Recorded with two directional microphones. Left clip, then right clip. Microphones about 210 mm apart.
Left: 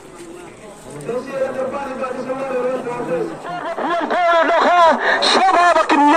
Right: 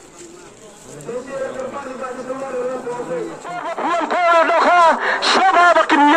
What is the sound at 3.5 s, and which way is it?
Speech, 40° left (ahead or behind).